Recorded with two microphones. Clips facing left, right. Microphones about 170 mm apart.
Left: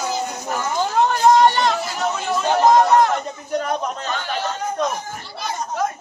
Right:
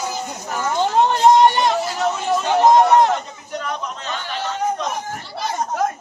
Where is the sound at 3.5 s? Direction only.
45° left (ahead or behind).